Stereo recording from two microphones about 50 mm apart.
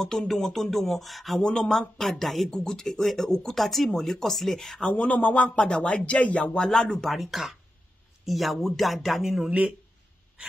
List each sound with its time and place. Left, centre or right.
0.0 s music: centre
0.3 s speech: centre
1.4 s music: centre
1.7 s speech: centre
2.5 s speech: centre
4.9 s speech: left
6.7 s speech: centre